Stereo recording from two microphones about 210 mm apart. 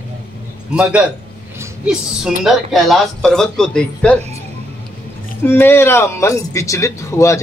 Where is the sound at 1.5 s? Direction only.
5° right (ahead or behind).